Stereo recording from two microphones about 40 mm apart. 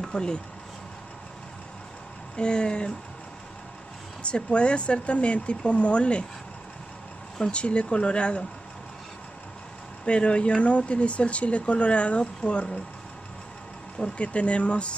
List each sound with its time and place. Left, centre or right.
0.1 s speech: left
2.3 s speech: left
4.2 s speech: left
7.3 s speech: centre
7.6 s speech: left
10.0 s speech: left
13.9 s speech: left